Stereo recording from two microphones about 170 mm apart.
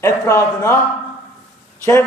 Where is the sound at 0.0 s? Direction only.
15° left (ahead or behind).